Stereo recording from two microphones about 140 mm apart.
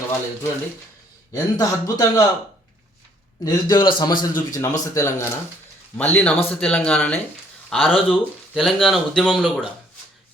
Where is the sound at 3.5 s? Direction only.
30° left (ahead or behind).